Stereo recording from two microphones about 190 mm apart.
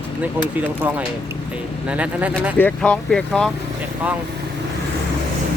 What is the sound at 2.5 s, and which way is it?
Speech, 5° left (ahead or behind).